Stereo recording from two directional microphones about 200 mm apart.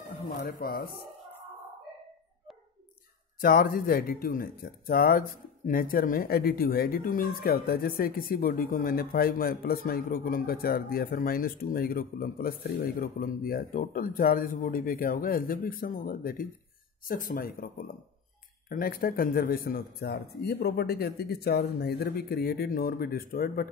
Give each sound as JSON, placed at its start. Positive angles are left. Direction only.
{"t": 0.4, "sound": "speech", "side_deg": 45}
{"t": 3.3, "sound": "speech", "side_deg": 45}